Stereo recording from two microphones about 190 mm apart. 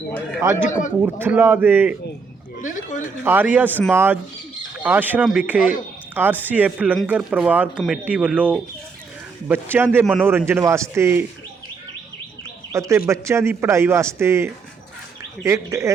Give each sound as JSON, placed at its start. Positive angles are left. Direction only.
{"t": 0.7, "sound": "a man's voice", "side_deg": 40}
{"t": 1.0, "sound": "a man's voice", "side_deg": -10}
{"t": 2.6, "sound": "a sound", "side_deg": 40}
{"t": 3.2, "sound": "a man's voice", "side_deg": -10}
{"t": 3.7, "sound": "a man's voice", "side_deg": 10}
{"t": 3.9, "sound": "a man's voice", "side_deg": -10}
{"t": 12.7, "sound": "a man's voice", "side_deg": -15}